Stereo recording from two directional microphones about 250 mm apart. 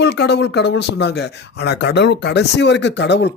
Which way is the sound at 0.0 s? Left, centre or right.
Left.